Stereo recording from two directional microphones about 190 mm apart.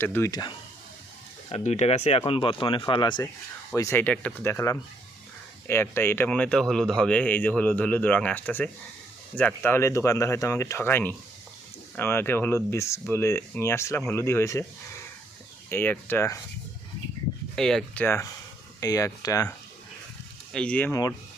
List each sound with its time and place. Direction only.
0.0 s speech: 10° left (ahead or behind)
1.5 s speech: 35° left (ahead or behind)
3.8 s speech: 15° left (ahead or behind)
15.7 s speech: 10° left (ahead or behind)
17.5 s speech: centre (ahead or behind); by 19.5 s 15° left (ahead or behind)
20.5 s speech: 5° left (ahead or behind)